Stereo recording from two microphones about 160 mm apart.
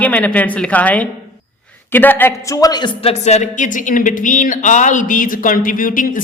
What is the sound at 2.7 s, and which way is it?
Speech, 30° left (ahead or behind).